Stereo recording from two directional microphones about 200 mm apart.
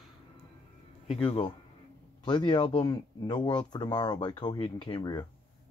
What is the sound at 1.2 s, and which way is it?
Speech, 25° left (ahead or behind).